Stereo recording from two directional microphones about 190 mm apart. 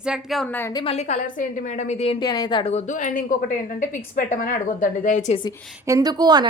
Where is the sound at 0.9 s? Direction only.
40° left (ahead or behind).